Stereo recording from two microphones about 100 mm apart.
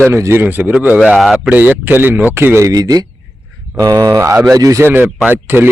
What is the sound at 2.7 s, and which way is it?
A man's voice, 40° right (ahead or behind).